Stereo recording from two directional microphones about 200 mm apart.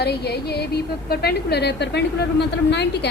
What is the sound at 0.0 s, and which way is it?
A woman's voice, 55° left (ahead or behind).